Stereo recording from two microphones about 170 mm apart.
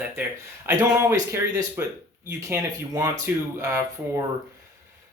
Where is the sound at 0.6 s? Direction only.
15° right (ahead or behind).